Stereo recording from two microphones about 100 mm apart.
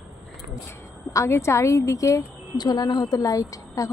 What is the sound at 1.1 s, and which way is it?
A woman's voice, 30° left (ahead or behind).